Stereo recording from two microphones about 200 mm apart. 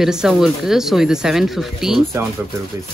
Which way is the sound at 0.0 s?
Centre (ahead or behind).